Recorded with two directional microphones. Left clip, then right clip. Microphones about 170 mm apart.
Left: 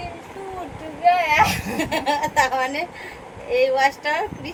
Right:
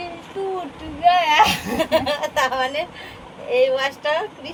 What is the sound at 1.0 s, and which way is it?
Speech, 35° right (ahead or behind).